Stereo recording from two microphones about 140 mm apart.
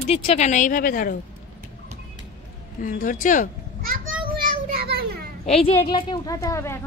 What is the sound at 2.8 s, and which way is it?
Speech, 70° left (ahead or behind).